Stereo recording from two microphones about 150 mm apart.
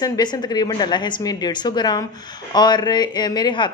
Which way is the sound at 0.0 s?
25° left (ahead or behind).